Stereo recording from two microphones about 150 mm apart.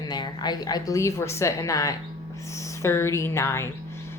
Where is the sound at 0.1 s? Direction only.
30° left (ahead or behind).